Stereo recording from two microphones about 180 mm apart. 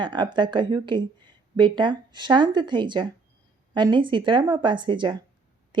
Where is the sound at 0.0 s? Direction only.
25° right (ahead or behind).